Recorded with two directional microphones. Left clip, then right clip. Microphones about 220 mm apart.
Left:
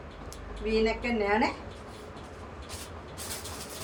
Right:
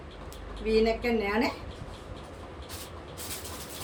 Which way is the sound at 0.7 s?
20° right (ahead or behind).